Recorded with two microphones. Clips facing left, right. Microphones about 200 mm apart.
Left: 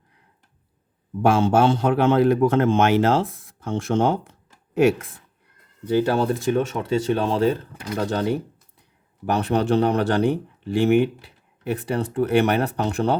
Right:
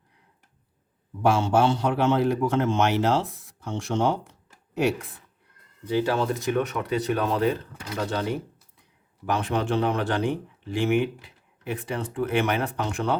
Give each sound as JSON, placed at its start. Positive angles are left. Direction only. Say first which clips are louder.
{"t": 1.3, "sound": "a man's voice", "louder": "left 4 dB", "side_deg": 50}
{"t": 6.0, "sound": "speech", "louder": "left 3 dB", "side_deg": 35}